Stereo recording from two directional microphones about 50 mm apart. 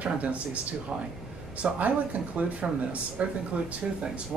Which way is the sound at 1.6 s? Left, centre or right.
Right.